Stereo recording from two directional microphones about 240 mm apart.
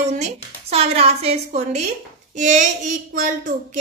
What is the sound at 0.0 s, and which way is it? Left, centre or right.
A woman's voice, right.